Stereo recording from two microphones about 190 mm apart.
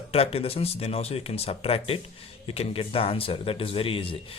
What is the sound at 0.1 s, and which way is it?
A man's voice, 30° left (ahead or behind).